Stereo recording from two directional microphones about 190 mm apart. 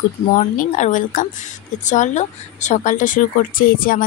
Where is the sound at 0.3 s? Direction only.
40° left (ahead or behind).